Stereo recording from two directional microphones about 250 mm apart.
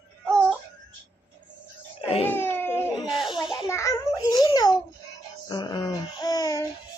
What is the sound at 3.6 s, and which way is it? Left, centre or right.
Babbling, centre.